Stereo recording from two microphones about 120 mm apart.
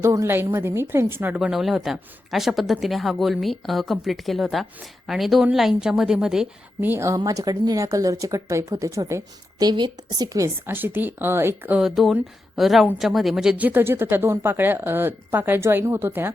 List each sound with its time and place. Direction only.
0.0 s speech: 25° right (ahead or behind)
1.4 s speech: 5° right (ahead or behind)
6.8 s speech: 20° right (ahead or behind)
7.3 s speech: 30° right (ahead or behind)
11.8 s speech: centre (ahead or behind); by 16.3 s 20° right (ahead or behind)